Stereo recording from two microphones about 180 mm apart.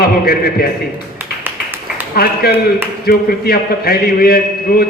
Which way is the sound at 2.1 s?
55° left (ahead or behind).